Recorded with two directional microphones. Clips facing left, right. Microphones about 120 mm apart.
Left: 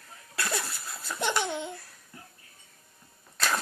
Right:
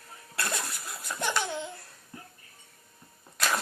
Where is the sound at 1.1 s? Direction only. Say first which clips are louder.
Left 2 dB; 20° left (ahead or behind).